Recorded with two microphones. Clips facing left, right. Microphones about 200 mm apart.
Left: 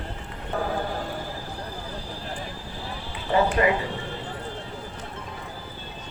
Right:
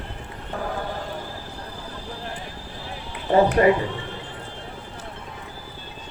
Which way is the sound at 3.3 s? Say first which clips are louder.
Right 5 dB; 40° right (ahead or behind).